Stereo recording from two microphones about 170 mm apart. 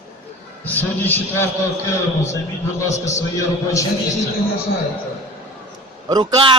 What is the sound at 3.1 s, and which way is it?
Speech, 20° left (ahead or behind).